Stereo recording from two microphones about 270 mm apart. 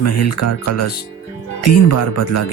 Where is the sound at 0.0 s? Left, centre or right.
Left.